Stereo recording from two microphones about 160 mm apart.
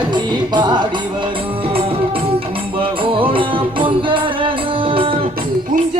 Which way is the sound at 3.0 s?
35° right (ahead or behind).